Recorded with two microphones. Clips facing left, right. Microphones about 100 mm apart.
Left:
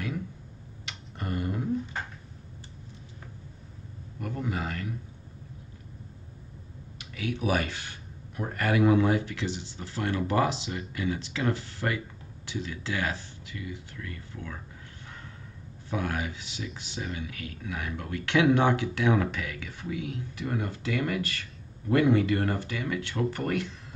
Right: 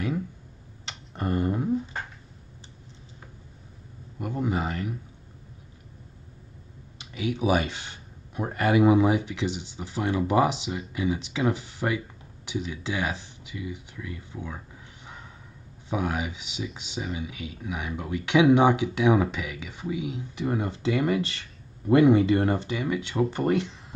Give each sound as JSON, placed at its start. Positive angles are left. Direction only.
{"t": 0.8, "sound": "a sound", "side_deg": -25}
{"t": 4.2, "sound": "a man's voice", "side_deg": -20}
{"t": 7.0, "sound": "speech", "side_deg": -15}
{"t": 15.9, "sound": "speech", "side_deg": -15}